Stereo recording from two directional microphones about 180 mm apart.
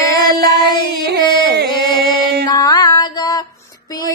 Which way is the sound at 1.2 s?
25° left (ahead or behind).